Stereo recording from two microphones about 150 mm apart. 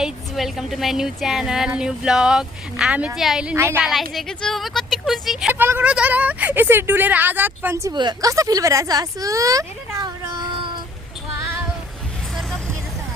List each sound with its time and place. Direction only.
0.0 s speech: centre (ahead or behind)
3.5 s a woman's voice: 15° right (ahead or behind)
4.1 s speech: centre (ahead or behind)
5.5 s a woman's voice: 15° right (ahead or behind); by 10.7 s 30° right (ahead or behind)